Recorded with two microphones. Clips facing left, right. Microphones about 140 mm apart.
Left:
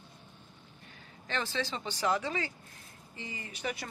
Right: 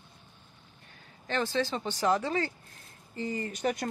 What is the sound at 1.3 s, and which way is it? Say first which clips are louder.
Speech: right 5 dB; 45° right (ahead or behind).